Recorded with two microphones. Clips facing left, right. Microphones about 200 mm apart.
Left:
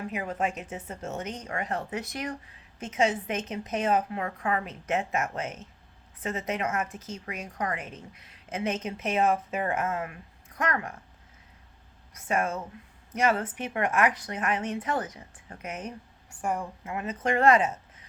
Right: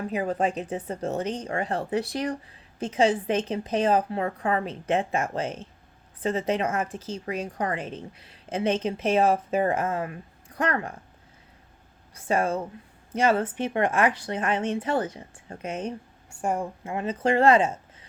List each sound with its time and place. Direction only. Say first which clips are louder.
0.1 s speech: right 6 dB; 35° right (ahead or behind)
12.1 s a woman's voice: right 4 dB; 30° right (ahead or behind)